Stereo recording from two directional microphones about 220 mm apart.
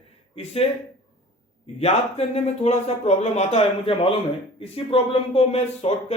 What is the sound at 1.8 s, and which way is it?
A man's voice, 30° left (ahead or behind).